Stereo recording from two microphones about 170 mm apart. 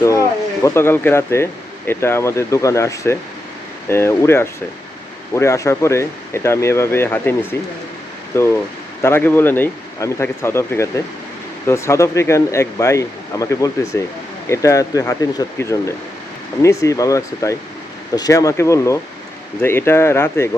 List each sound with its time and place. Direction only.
0.0 s speech: 20° left (ahead or behind)
8.3 s speech: 15° left (ahead or behind)